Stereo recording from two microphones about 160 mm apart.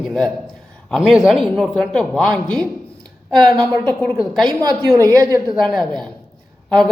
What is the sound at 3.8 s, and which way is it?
Speech, 10° left (ahead or behind).